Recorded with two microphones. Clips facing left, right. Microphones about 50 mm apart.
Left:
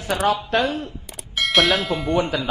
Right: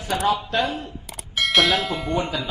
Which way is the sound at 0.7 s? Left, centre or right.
Centre.